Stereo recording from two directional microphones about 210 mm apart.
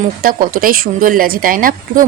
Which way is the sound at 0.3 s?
45° right (ahead or behind).